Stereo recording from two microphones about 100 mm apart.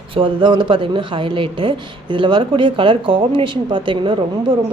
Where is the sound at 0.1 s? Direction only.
60° right (ahead or behind).